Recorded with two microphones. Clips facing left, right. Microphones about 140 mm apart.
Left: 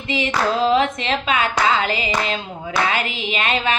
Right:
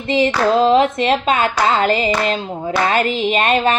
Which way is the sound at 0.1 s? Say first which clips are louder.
Right 6 dB; 35° right (ahead or behind).